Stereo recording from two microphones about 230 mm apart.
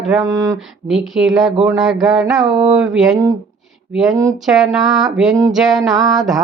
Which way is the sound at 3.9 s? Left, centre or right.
Centre.